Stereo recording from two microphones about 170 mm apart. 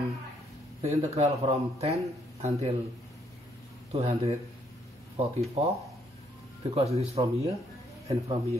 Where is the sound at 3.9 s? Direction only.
40° right (ahead or behind).